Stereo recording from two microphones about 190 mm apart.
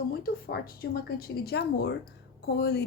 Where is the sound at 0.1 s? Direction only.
55° left (ahead or behind).